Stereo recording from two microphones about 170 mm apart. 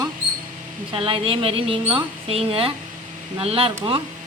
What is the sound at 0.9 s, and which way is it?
A woman's voice, 30° right (ahead or behind).